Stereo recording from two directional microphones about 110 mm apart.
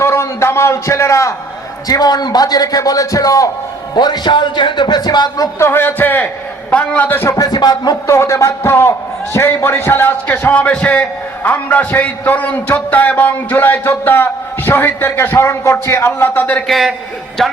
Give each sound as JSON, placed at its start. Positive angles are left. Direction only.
{"t": 0.0, "sound": "a man's voice", "side_deg": 25}
{"t": 5.5, "sound": "a man's voice", "side_deg": 20}
{"t": 7.3, "sound": "a man's voice", "side_deg": 35}
{"t": 16.6, "sound": "a man's voice", "side_deg": 0}